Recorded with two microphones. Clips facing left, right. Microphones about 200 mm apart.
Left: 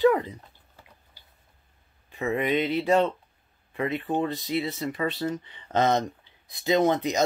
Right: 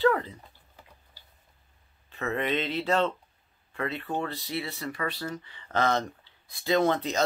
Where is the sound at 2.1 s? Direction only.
15° left (ahead or behind).